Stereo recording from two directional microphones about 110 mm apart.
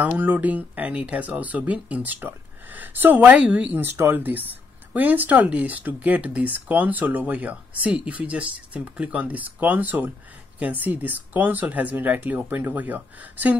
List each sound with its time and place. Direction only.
0.0 s speech: 15° right (ahead or behind)